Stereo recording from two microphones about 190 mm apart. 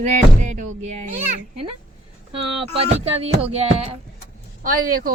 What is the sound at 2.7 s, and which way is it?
Speech, 30° right (ahead or behind).